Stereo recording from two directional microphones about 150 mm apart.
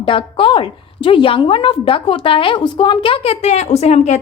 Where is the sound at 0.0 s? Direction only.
35° left (ahead or behind).